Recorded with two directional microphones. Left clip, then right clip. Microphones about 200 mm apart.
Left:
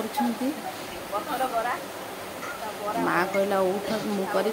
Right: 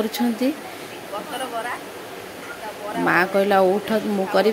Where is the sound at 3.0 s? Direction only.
20° right (ahead or behind).